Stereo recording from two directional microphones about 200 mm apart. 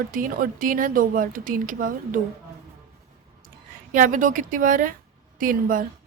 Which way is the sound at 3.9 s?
40° right (ahead or behind).